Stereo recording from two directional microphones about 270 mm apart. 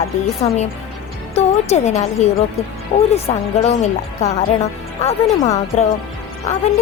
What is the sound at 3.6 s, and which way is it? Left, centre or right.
A woman's voice, left.